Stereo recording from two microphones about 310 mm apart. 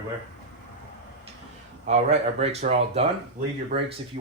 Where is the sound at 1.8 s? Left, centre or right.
Right.